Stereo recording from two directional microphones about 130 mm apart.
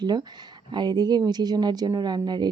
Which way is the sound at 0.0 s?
35° right (ahead or behind).